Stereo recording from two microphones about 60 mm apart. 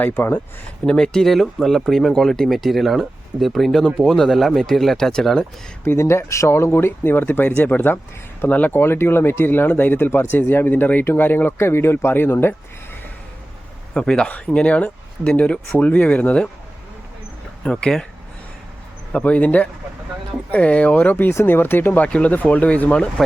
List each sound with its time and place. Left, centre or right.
0.0 s speech: left
0.9 s speech: centre
5.8 s speech: left
8.7 s speech: left
11.5 s speech: left
13.9 s speech: centre
17.6 s speech: centre
19.1 s speech: left
22.0 s speech: left